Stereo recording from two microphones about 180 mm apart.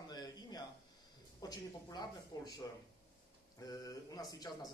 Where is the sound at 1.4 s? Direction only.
20° left (ahead or behind).